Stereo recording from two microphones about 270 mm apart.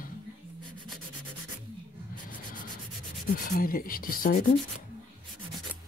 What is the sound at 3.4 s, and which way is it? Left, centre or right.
Speech, left.